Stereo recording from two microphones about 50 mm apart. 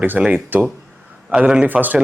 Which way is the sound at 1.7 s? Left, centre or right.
Right.